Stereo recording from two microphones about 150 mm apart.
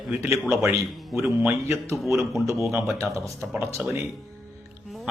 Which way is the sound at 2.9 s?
20° right (ahead or behind).